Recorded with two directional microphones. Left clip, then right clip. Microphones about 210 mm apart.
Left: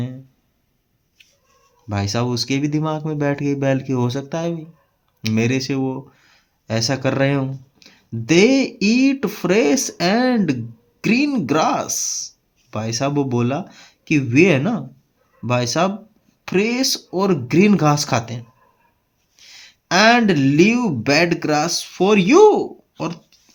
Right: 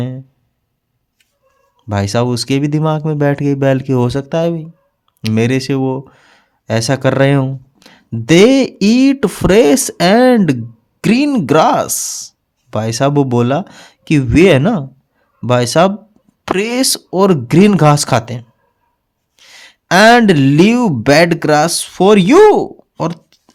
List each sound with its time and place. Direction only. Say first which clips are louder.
1.9 s speech: right 7 dB; 45° right (ahead or behind)